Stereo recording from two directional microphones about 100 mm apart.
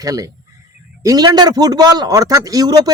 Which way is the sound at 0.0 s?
35° right (ahead or behind).